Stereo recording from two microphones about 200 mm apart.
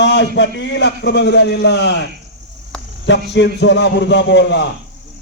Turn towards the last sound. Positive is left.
turn(degrees=60)  # may be behind; listen again after turning